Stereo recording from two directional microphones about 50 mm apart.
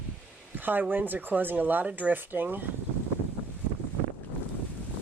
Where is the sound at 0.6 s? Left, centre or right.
Right.